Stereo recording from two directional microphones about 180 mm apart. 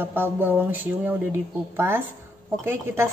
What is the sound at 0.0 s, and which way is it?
A woman's voice, 10° right (ahead or behind).